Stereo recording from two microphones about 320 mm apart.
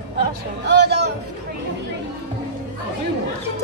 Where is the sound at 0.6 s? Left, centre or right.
Right.